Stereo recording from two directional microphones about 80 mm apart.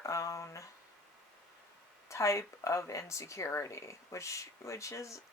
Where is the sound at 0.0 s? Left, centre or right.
Left.